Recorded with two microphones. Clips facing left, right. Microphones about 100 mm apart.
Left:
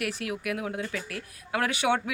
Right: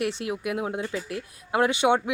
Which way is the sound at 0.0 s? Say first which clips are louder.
Right 4 dB; 25° right (ahead or behind).